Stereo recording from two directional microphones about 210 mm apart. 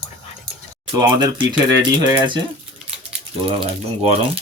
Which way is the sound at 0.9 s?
20° right (ahead or behind).